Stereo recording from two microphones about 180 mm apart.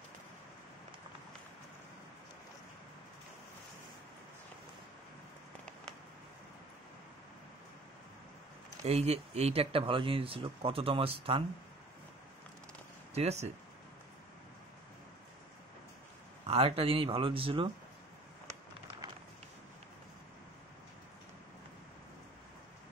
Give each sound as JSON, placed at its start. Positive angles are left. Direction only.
{"t": 8.8, "sound": "speech", "side_deg": -35}
{"t": 13.1, "sound": "speech", "side_deg": -35}
{"t": 16.4, "sound": "speech", "side_deg": -35}